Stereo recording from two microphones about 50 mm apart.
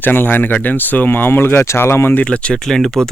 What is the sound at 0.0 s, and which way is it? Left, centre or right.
Speech, left.